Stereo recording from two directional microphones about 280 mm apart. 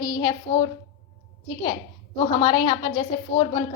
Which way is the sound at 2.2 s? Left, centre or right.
Centre.